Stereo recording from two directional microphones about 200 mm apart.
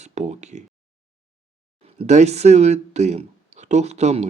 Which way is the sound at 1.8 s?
35° right (ahead or behind).